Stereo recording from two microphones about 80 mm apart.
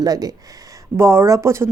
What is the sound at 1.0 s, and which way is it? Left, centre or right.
Speech, right.